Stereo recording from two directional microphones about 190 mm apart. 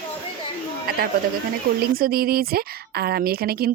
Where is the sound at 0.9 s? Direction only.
50° right (ahead or behind).